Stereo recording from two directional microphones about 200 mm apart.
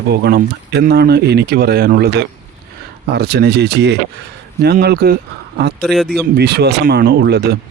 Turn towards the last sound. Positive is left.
turn(degrees=-55)  # may be behind; listen again after turning